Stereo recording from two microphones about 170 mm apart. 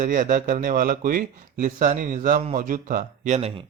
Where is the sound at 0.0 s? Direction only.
55° right (ahead or behind); by 3.7 s 35° right (ahead or behind).